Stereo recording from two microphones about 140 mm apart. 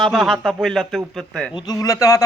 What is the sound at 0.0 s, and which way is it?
Speech, centre (ahead or behind).